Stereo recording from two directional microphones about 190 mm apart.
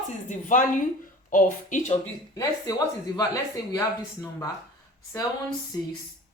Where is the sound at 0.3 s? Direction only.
40° left (ahead or behind).